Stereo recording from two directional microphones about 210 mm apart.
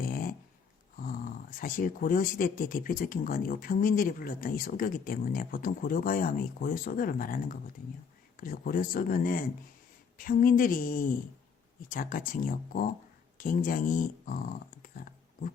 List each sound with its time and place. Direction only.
0.0 s dog: 40° left (ahead or behind)
0.9 s speech: 40° left (ahead or behind)